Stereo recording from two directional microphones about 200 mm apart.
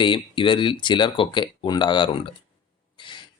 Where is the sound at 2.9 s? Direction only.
25° left (ahead or behind).